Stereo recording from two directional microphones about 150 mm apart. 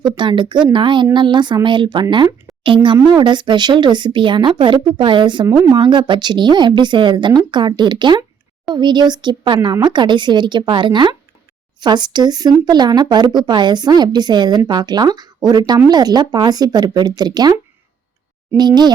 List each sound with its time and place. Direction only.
0.0 s a woman's voice: 30° right (ahead or behind)